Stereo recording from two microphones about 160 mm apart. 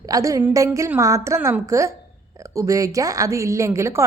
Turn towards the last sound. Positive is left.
turn(degrees=-15)  # may be behind; listen again after turning